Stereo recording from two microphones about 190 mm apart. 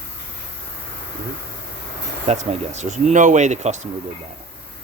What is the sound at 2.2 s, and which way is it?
Speech, 35° right (ahead or behind).